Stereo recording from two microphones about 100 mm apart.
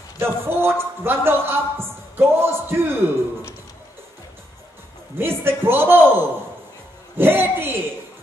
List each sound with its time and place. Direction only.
0.2 s a man's voice: 25° right (ahead or behind)
5.1 s a man's voice: 25° right (ahead or behind)